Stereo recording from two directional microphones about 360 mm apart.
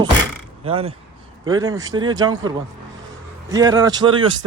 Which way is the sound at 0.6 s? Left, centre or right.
Centre.